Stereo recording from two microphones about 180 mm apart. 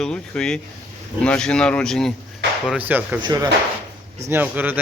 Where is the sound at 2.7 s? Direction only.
10° right (ahead or behind).